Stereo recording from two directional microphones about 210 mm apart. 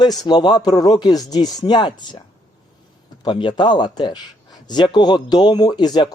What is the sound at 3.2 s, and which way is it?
Speech, 25° left (ahead or behind).